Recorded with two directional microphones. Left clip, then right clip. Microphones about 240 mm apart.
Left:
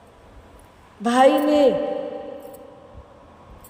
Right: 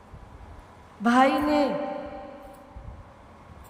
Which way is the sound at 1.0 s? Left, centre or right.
Centre.